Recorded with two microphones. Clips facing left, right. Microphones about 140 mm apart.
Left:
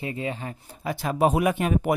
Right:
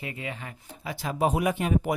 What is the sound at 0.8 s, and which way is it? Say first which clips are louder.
Speech: left 4 dB; 50° left (ahead or behind).